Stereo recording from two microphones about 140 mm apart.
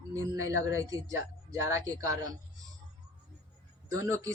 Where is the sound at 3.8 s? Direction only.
20° right (ahead or behind).